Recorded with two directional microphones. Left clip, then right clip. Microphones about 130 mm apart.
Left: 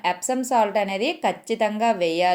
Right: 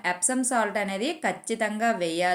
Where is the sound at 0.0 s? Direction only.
25° left (ahead or behind).